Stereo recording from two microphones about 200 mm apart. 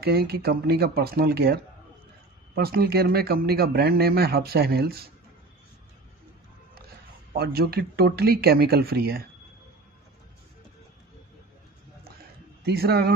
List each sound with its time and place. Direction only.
0.0 s speech: 50° right (ahead or behind)
7.3 s speech: 50° right (ahead or behind)
12.6 s speech: 55° right (ahead or behind)